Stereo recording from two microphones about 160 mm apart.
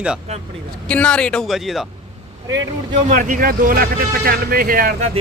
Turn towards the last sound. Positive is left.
turn(degrees=-65)  # may be behind; listen again after turning